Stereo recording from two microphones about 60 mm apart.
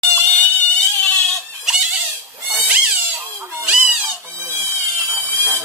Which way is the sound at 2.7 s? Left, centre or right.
Centre.